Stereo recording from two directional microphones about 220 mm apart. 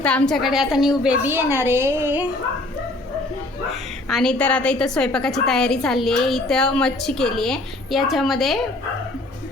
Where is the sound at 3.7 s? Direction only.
Centre (ahead or behind).